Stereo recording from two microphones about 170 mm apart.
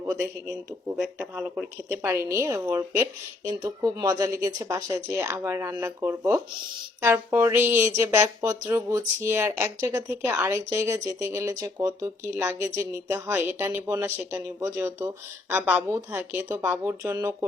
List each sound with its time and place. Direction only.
0.0 s a man's voice: 20° right (ahead or behind)
0.9 s speech: 5° right (ahead or behind)
1.9 s speech: 15° right (ahead or behind)